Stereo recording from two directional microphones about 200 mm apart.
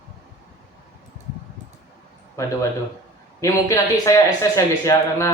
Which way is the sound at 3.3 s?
15° left (ahead or behind).